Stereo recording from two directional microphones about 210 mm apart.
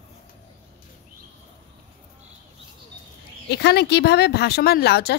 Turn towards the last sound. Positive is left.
turn(degrees=50)  # may be behind; listen again after turning